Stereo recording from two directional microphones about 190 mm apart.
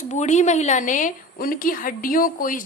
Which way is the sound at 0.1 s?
35° left (ahead or behind).